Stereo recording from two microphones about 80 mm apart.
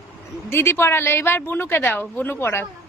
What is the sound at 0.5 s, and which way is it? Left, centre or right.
A woman's voice, left.